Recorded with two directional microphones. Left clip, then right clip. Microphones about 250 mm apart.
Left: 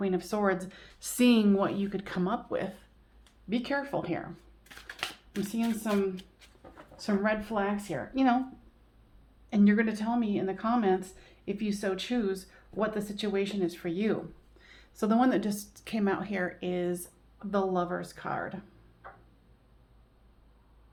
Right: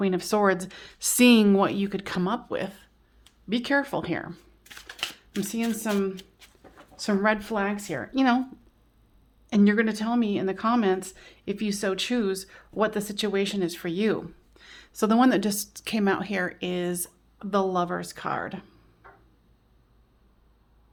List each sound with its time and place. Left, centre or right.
0.0 s speech: right
3.5 s speech: right
4.6 s a sound: right
5.4 s speech: right
9.5 s speech: right